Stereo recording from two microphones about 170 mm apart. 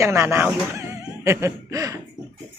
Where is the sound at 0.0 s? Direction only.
15° right (ahead or behind).